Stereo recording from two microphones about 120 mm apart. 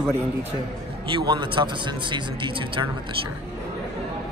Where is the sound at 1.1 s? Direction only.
40° right (ahead or behind).